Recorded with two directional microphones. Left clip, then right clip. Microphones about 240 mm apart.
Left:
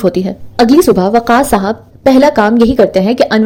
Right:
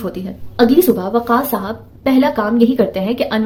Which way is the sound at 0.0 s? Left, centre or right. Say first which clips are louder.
Left 12 dB; left.